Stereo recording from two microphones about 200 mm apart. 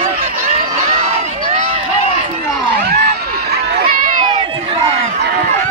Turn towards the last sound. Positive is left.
turn(degrees=-45)  # may be behind; listen again after turning